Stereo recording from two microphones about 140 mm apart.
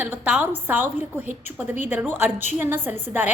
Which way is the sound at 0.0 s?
10° right (ahead or behind).